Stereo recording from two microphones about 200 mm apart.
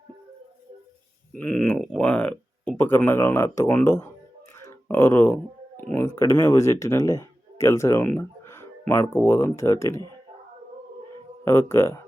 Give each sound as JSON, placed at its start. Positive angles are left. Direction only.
{"t": 1.4, "sound": "speech", "side_deg": 5}
{"t": 4.5, "sound": "a sound", "side_deg": 15}
{"t": 5.9, "sound": "speech", "side_deg": 15}
{"t": 11.4, "sound": "speech", "side_deg": 10}